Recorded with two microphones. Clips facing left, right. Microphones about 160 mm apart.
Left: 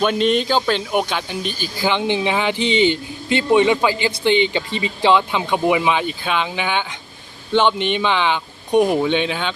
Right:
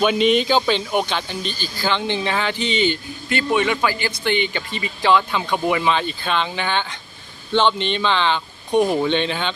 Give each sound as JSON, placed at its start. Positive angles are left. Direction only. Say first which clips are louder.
{"t": 0.0, "sound": "speech", "louder": "even", "side_deg": -5}